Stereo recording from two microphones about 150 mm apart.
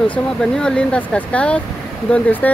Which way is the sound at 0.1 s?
5° left (ahead or behind).